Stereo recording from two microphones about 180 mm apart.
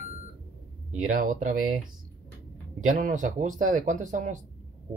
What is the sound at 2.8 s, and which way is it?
Speech, 50° right (ahead or behind).